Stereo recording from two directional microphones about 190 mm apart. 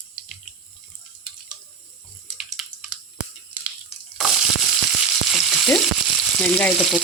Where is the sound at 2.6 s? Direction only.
Centre (ahead or behind).